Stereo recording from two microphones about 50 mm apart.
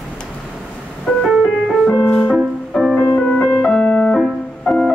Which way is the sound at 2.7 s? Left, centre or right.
Centre.